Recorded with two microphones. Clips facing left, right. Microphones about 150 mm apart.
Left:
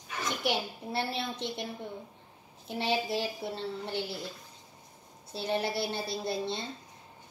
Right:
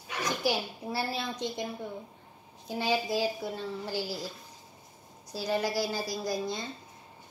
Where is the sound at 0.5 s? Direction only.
25° left (ahead or behind).